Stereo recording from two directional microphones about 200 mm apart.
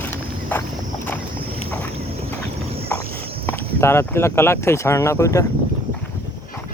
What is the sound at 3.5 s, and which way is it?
Speech, 10° left (ahead or behind).